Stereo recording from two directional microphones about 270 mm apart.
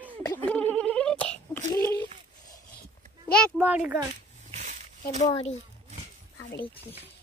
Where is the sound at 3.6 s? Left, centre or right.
Centre.